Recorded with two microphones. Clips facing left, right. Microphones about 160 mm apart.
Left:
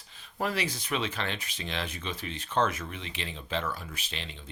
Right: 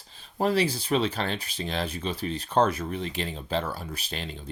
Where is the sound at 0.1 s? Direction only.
30° right (ahead or behind).